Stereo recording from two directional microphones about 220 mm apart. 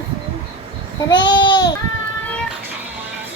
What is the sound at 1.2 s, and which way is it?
Babbling, 20° left (ahead or behind).